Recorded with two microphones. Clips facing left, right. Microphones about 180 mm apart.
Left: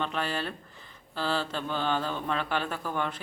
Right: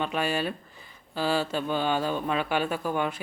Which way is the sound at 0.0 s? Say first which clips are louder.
Right 4 dB; 10° right (ahead or behind).